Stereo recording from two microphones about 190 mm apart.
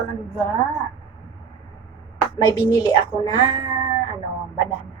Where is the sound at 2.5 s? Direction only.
20° left (ahead or behind).